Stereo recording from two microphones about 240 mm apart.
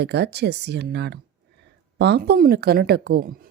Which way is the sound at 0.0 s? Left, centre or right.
Right.